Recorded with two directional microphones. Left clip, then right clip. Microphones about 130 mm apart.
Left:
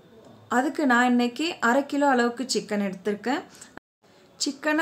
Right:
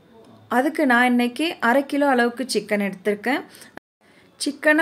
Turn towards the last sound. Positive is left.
turn(degrees=-20)  # may be behind; listen again after turning